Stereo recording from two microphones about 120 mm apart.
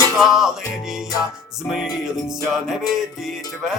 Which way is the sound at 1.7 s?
5° right (ahead or behind).